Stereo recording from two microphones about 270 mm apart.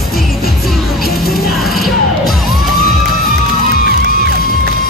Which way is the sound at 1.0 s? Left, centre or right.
Centre.